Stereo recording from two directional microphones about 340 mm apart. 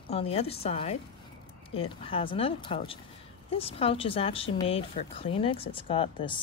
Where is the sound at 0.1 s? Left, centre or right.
Centre.